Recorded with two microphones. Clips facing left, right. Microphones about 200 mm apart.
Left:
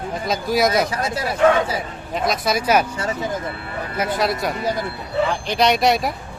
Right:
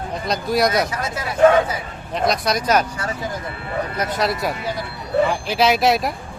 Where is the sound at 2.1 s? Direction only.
Centre (ahead or behind).